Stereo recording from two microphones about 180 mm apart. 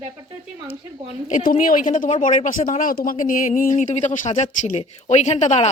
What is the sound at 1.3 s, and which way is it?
Speech, 45° left (ahead or behind).